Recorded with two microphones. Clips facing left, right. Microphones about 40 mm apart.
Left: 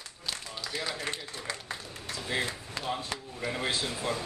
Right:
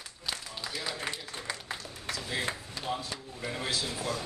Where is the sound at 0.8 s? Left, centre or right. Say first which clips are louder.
Left 1 dB; centre.